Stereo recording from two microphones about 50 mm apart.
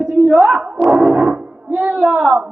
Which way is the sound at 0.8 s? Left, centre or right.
Centre.